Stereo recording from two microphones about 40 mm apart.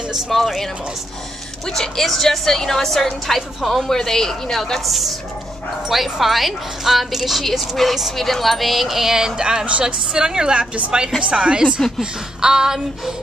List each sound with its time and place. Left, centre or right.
0.3 s a woman's voice: centre
1.7 s a woman's voice: centre
3.3 s a woman's voice: centre
3.8 s a woman's voice: centre
9.7 s a woman's voice: right
10.1 s a woman's voice: centre
12.0 s a sound: centre